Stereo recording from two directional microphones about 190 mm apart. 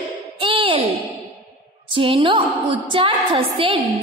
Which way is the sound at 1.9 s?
25° right (ahead or behind).